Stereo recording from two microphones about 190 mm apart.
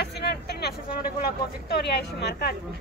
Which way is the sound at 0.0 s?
60° left (ahead or behind).